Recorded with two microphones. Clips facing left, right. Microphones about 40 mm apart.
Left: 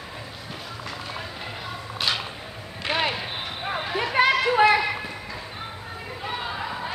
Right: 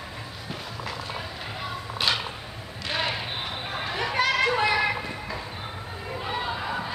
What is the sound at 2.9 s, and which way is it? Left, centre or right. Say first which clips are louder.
Basketball bounce: left 4 dB; left.